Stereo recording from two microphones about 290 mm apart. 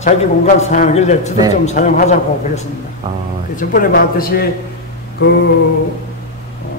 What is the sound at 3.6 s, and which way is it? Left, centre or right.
Speech, left.